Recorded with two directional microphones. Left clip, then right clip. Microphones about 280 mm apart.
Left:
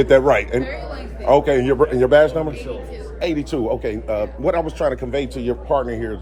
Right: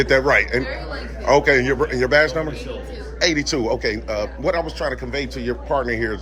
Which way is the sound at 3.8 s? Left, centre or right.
Centre.